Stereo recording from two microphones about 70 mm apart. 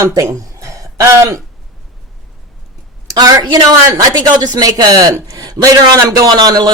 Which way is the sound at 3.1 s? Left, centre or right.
Right.